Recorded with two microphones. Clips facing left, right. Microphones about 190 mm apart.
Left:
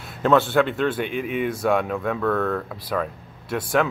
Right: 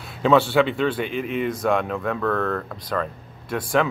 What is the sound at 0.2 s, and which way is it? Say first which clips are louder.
Speech: right 1 dB; centre (ahead or behind).